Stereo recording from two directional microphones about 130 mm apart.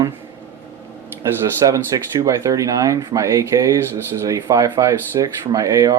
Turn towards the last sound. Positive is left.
turn(degrees=-25)  # may be behind; listen again after turning